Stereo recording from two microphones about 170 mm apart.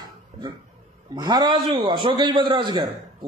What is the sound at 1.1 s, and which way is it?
A man's voice, 25° right (ahead or behind).